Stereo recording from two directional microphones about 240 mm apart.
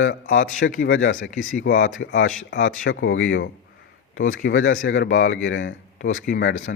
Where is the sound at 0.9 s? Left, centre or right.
Left.